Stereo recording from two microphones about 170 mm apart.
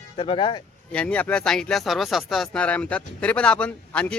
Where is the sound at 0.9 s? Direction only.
10° left (ahead or behind).